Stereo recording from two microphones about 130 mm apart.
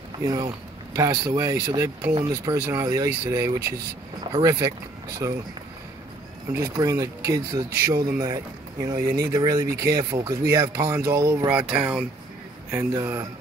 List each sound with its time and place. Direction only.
0.2 s speech: 30° right (ahead or behind)
6.5 s speech: 25° right (ahead or behind)
11.5 s speech: 5° right (ahead or behind)
12.7 s speech: 20° right (ahead or behind)